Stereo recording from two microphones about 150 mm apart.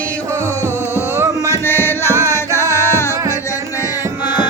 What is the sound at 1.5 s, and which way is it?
Music, 15° left (ahead or behind).